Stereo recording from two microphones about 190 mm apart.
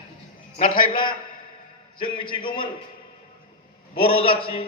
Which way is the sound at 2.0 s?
25° left (ahead or behind).